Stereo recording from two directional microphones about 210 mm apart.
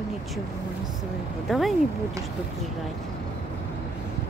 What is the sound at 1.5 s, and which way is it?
Speech, centre (ahead or behind).